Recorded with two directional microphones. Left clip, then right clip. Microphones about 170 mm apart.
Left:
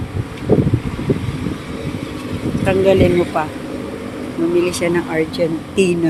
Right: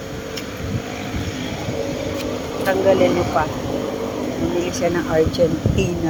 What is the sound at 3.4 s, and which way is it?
Speech, 85° left.